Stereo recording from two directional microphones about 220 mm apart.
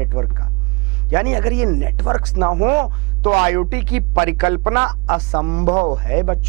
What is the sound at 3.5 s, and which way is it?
Speech, 15° right (ahead or behind).